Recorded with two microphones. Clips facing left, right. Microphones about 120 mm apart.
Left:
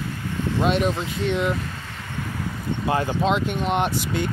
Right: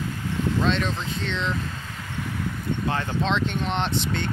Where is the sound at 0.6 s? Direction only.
10° left (ahead or behind).